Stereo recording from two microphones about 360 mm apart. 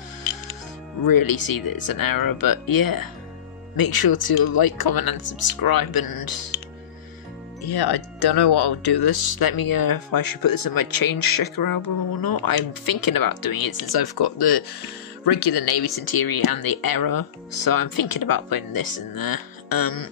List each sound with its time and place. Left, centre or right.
1.0 s speech: left
7.6 s speech: left
16.0 s speech: left